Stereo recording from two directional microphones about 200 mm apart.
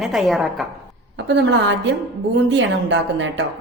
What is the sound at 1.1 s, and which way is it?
A woman's voice, 60° right (ahead or behind).